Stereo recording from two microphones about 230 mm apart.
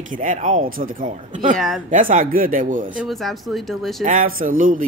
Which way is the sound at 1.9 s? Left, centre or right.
Right.